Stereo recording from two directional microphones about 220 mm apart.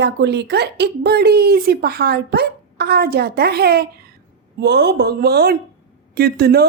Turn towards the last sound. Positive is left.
turn(degrees=-45)  # may be behind; listen again after turning